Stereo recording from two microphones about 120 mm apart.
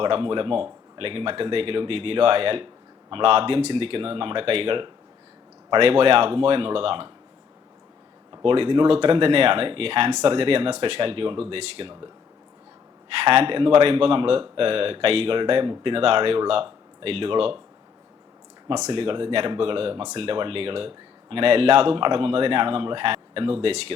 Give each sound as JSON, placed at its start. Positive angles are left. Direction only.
{"t": 0.0, "sound": "speech", "side_deg": -45}
{"t": 8.4, "sound": "speech", "side_deg": -50}
{"t": 13.2, "sound": "speech", "side_deg": -55}
{"t": 18.9, "sound": "speech", "side_deg": -50}